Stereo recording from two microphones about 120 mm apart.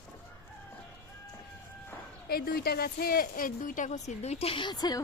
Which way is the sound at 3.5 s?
90° left.